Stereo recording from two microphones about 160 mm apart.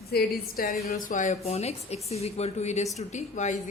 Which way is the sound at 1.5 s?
40° left (ahead or behind).